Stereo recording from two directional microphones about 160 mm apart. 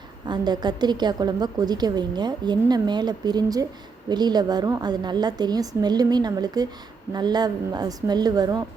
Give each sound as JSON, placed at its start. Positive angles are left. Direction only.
{"t": 0.3, "sound": "a woman's voice", "side_deg": -25}